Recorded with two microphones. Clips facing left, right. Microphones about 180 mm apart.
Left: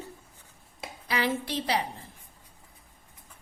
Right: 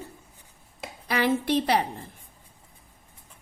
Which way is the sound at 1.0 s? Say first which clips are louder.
Right 5 dB; 55° right (ahead or behind).